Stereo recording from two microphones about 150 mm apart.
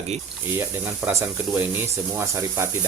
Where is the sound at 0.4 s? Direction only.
15° right (ahead or behind).